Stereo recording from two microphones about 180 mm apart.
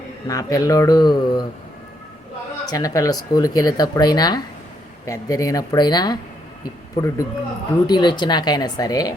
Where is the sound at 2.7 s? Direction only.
20° left (ahead or behind).